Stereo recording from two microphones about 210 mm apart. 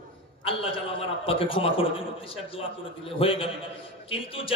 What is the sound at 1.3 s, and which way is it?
Music, 25° left (ahead or behind).